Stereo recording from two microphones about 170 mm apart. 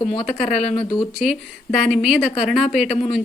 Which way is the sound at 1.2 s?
Centre (ahead or behind).